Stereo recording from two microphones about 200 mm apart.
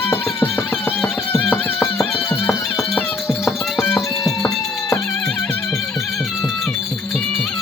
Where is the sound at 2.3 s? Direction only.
10° left (ahead or behind).